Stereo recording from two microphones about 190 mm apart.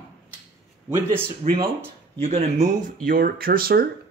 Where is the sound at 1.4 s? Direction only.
35° right (ahead or behind).